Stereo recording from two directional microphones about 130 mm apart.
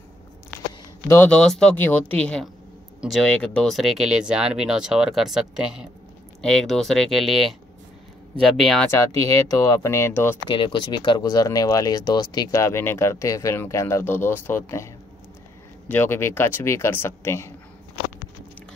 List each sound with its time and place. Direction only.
1.0 s speech: 15° left (ahead or behind)
8.9 s speech: 20° left (ahead or behind)
10.5 s speech: 40° left (ahead or behind); by 14.9 s 20° left (ahead or behind)
15.9 s speech: 15° left (ahead or behind)